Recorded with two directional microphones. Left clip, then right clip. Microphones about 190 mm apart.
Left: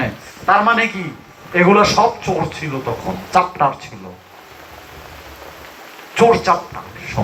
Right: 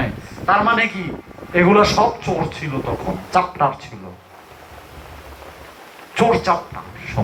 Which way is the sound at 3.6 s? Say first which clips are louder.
Left 2 dB; 40° right (ahead or behind).